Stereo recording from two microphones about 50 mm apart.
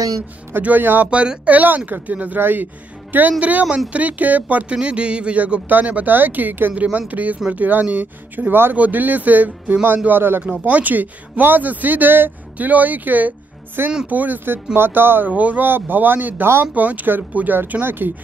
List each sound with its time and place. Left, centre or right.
0.6 s speech: right
1.1 s speech: right
4.7 s speech: right
6.7 s speech: right
8.7 s speech: right
10.7 s speech: right
15.3 s speech: right
15.6 s speech: right
17.6 s speech: right